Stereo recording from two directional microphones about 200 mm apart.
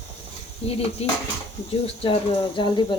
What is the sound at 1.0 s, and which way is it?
A woman's voice, 30° left (ahead or behind).